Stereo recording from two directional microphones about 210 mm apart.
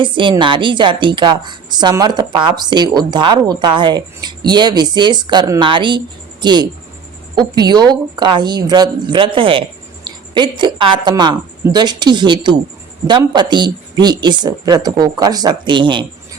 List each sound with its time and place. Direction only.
0.0 s a woman's voice: 25° right (ahead or behind)